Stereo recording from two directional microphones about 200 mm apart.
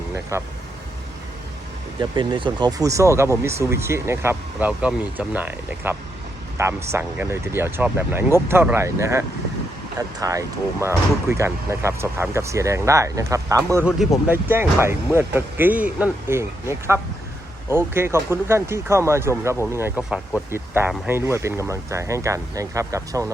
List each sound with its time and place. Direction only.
0.1 s speech: 15° right (ahead or behind)
2.0 s speech: 25° right (ahead or behind)
20.0 s speech: 5° right (ahead or behind)